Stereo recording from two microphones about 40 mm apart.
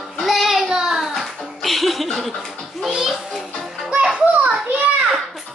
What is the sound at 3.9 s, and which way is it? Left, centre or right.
Music, right.